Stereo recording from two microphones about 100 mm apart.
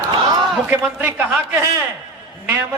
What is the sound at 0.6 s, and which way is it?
Speech, 15° right (ahead or behind).